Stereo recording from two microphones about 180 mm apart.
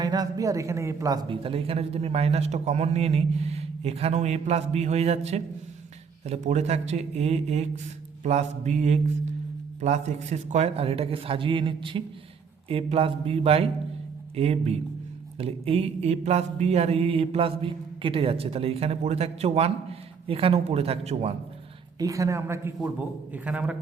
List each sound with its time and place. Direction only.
0.0 s mantra: 20° right (ahead or behind); by 21.3 s 35° right (ahead or behind)
21.9 s speech: 20° right (ahead or behind)